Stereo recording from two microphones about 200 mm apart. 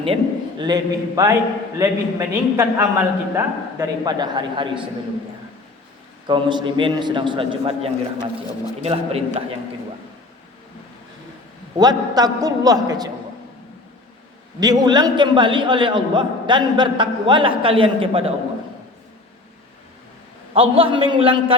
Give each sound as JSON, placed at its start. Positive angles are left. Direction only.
{"t": 0.6, "sound": "a man's voice", "side_deg": -20}
{"t": 6.2, "sound": "a man's voice", "side_deg": -20}
{"t": 11.8, "sound": "a man's voice", "side_deg": -20}
{"t": 14.6, "sound": "a man's voice", "side_deg": -20}
{"t": 20.5, "sound": "a man's voice", "side_deg": -25}